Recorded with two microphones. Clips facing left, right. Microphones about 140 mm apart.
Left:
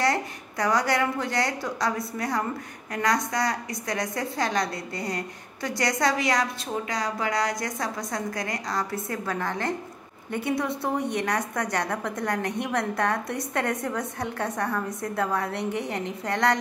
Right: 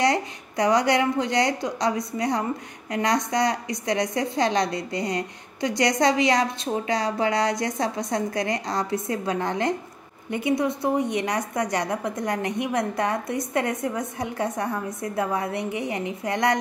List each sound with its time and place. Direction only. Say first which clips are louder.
0.0 s a woman's voice: right 3 dB; 20° right (ahead or behind)